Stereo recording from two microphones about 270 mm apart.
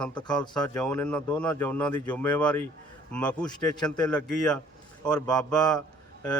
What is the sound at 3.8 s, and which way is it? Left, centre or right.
Speech, centre.